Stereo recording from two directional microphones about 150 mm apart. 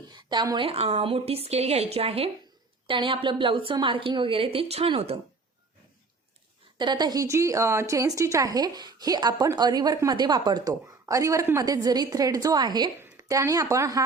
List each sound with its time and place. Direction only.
0.1 s a woman's voice: 30° right (ahead or behind)
6.7 s a woman's voice: 30° right (ahead or behind)